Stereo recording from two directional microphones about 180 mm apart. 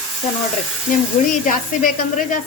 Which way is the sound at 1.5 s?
50° left (ahead or behind).